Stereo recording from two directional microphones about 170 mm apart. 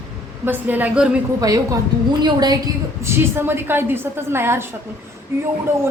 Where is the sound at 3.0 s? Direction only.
15° right (ahead or behind).